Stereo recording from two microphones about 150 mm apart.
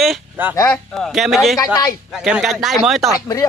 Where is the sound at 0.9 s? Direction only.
Centre (ahead or behind).